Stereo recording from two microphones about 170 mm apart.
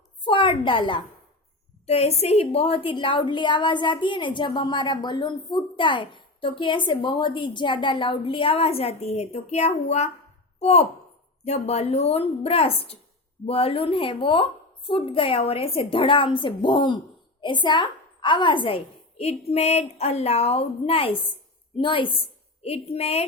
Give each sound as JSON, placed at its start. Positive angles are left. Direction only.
{"t": 0.3, "sound": "a woman's voice", "side_deg": 30}